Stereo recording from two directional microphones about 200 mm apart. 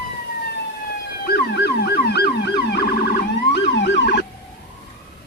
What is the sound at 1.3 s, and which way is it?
Siren, 55° left (ahead or behind).